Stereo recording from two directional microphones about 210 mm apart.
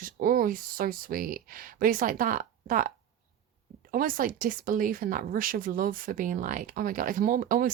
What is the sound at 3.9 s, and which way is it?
Speech, 40° right (ahead or behind).